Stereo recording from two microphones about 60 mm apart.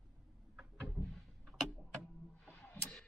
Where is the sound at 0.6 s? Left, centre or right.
Centre.